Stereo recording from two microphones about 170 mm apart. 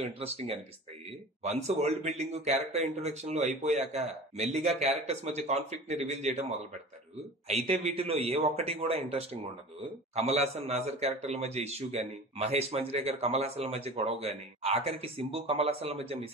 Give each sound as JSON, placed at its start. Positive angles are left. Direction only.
{"t": 0.0, "sound": "a man's voice", "side_deg": -35}
{"t": 7.4, "sound": "a man's voice", "side_deg": -40}